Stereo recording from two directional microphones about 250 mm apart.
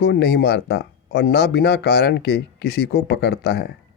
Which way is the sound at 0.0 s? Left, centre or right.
Left.